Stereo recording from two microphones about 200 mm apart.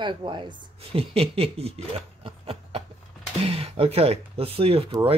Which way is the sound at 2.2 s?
30° right (ahead or behind).